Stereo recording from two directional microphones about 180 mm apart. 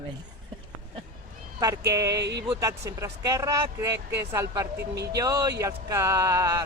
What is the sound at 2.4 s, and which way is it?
Speech, 20° right (ahead or behind).